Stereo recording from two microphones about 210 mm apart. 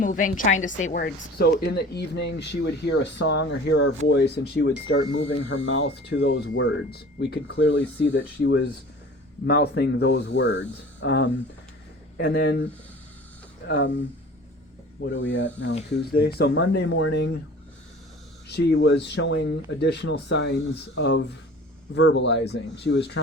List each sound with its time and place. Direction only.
0.0 s a woman's voice: 40° left (ahead or behind); by 6.7 s 70° left (ahead or behind)
6.9 s a woman's voice: 50° left (ahead or behind)
13.7 s a woman's voice: 55° left (ahead or behind)
15.0 s a woman's voice: 60° left (ahead or behind)
18.4 s speech: 50° left (ahead or behind)